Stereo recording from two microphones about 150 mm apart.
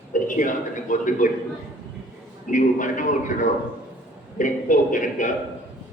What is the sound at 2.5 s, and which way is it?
A man's voice, 60° left (ahead or behind).